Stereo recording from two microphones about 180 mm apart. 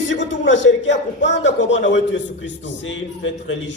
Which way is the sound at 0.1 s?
90° left.